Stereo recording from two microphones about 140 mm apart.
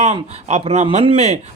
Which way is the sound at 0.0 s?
50° right (ahead or behind).